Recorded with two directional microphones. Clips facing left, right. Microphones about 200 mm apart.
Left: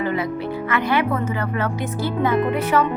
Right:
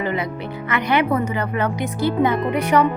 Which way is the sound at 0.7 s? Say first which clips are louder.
Right 2 dB; 20° right (ahead or behind).